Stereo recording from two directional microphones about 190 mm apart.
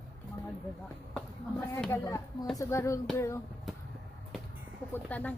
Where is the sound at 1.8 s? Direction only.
15° left (ahead or behind).